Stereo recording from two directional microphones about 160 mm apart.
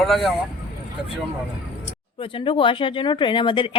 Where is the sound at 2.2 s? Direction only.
35° left (ahead or behind).